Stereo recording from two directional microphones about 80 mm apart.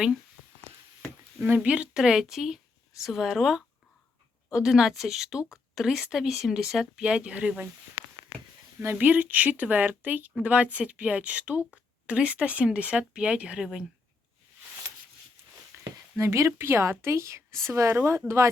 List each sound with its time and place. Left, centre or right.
1.5 s a woman's voice: centre
8.8 s a woman's voice: right
15.7 s a sound: right
16.1 s speech: right